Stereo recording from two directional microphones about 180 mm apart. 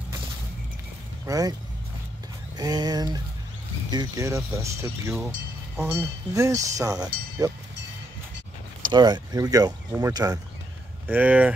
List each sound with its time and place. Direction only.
1.2 s speech: 20° right (ahead or behind)
2.5 s speech: 25° right (ahead or behind)
8.9 s speech: 25° right (ahead or behind)
11.1 s speech: 10° right (ahead or behind)